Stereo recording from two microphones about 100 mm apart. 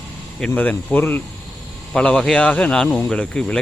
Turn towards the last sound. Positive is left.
turn(degrees=10)  # may be behind; listen again after turning